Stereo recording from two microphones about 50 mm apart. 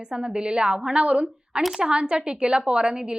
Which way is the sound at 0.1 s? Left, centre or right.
Centre.